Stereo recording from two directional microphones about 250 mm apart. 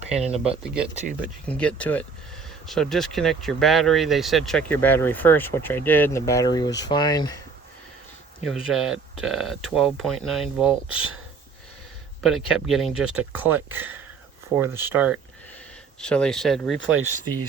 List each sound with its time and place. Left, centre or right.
0.1 s speech: right
0.6 s speech: centre
8.4 s speech: centre
12.2 s speech: centre